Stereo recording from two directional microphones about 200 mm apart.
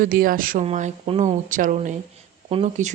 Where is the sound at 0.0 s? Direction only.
45° right (ahead or behind).